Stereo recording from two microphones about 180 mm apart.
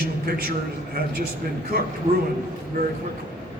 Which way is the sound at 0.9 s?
55° right (ahead or behind).